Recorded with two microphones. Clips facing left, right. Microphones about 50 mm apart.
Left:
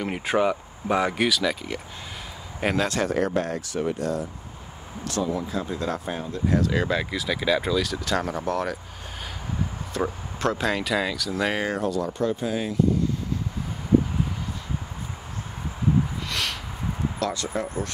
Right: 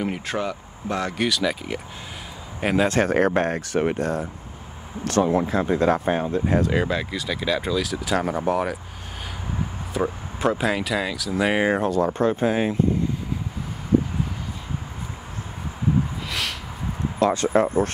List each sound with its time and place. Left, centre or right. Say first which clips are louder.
0.1 s speech: left 4 dB; centre
2.9 s speech: right 4 dB; right
6.8 s speech: right 1 dB; centre
9.9 s speech: right 3 dB; centre
11.4 s speech: right 5 dB; right
11.9 s speech: right 5 dB; right
16.3 s a sound: right 1 dB; centre
17.2 s speech: right 11 dB; right